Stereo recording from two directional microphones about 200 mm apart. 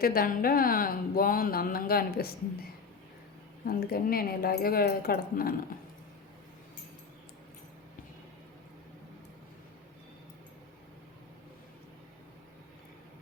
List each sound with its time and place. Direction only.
0.0 s speech: 45° left (ahead or behind)
3.7 s speech: 50° left (ahead or behind)